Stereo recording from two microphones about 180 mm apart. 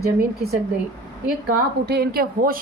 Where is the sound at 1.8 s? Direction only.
60° right (ahead or behind).